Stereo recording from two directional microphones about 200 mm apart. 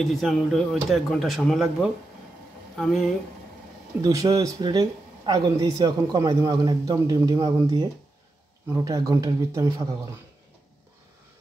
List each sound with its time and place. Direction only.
0.0 s speech: centre (ahead or behind)
4.0 s speech: 15° right (ahead or behind)